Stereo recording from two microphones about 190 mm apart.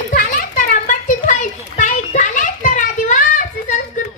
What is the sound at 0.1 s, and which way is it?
Children playing, 50° left (ahead or behind).